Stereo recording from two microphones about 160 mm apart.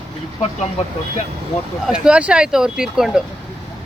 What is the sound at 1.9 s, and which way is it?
Speech, 5° right (ahead or behind).